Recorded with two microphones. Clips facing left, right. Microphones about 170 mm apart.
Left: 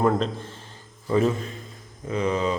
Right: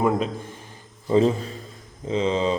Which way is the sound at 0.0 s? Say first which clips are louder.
Even; 5° right (ahead or behind).